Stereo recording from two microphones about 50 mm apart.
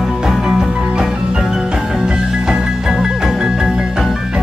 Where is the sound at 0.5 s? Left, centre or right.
Centre.